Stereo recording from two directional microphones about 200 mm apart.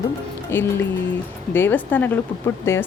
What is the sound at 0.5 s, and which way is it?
Speech, 10° left (ahead or behind).